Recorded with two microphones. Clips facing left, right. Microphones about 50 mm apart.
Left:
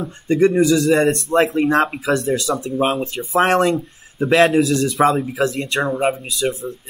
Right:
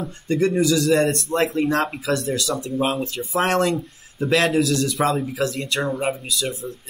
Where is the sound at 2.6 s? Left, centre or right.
Left.